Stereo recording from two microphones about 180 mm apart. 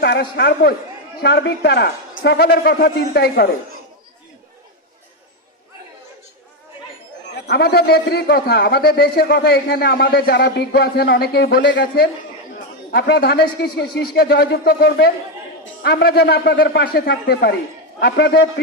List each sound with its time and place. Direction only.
0.0 s a man's voice: 65° left (ahead or behind)
7.4 s a man's voice: 65° left (ahead or behind)